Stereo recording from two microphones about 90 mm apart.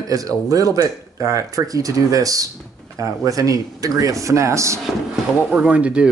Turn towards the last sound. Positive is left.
turn(degrees=-15)  # may be behind; listen again after turning